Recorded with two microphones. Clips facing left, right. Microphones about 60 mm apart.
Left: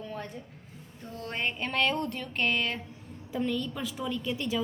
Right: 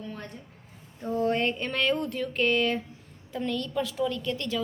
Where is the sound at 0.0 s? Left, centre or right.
Centre.